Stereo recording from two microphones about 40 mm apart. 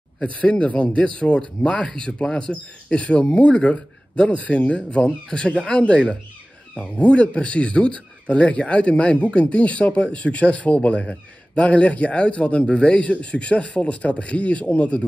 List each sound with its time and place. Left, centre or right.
0.2 s speech: left